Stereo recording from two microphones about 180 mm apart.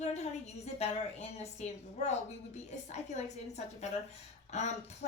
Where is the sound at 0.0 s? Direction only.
40° left (ahead or behind).